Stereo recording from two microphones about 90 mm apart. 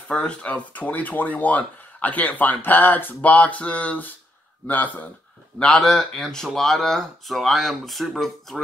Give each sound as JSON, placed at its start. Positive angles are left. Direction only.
{"t": 0.1, "sound": "speech", "side_deg": 15}
{"t": 5.6, "sound": "speech", "side_deg": 0}